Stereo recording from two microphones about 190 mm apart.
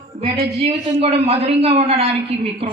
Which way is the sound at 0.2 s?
30° right (ahead or behind).